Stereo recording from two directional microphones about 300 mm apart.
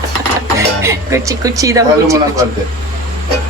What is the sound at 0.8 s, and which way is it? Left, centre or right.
A woman's voice, centre.